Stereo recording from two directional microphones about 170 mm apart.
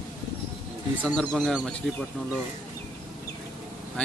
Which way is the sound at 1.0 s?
5° left (ahead or behind).